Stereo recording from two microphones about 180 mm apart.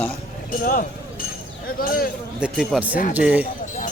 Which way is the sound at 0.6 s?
50° left (ahead or behind).